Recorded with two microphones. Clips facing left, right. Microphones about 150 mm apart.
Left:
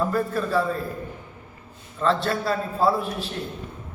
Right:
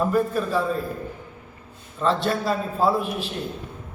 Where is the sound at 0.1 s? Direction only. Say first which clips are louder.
Right 2 dB; 15° right (ahead or behind).